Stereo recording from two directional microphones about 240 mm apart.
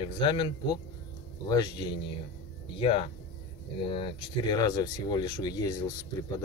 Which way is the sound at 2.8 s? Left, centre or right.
Left.